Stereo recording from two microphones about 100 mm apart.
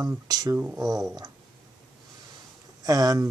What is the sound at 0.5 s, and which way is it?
Speech, 15° right (ahead or behind).